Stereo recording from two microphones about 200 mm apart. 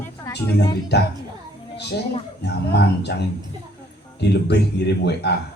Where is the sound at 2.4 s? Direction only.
55° left (ahead or behind).